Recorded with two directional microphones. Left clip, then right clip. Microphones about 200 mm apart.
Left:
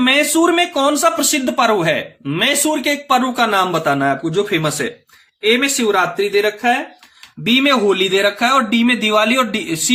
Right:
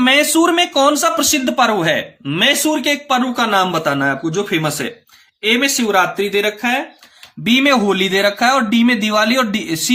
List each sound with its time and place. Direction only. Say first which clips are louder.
0.0 s speech: right 1 dB; 20° right (ahead or behind)